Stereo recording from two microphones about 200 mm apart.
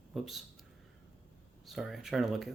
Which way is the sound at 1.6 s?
Centre (ahead or behind).